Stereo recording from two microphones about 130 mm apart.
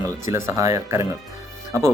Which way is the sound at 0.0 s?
20° right (ahead or behind).